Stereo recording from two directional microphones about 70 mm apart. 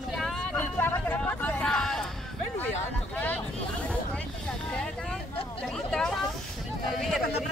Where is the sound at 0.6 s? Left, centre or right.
Left.